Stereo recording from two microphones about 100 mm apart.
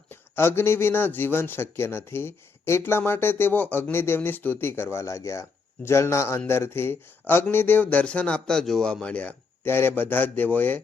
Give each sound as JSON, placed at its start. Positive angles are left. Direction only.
{"t": 0.1, "sound": "speech", "side_deg": 25}